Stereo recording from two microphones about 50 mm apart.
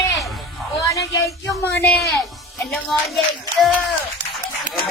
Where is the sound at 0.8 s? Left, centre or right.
Left.